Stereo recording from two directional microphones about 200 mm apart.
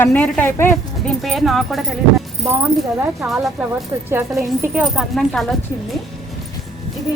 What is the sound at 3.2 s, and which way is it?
A woman's voice, centre (ahead or behind).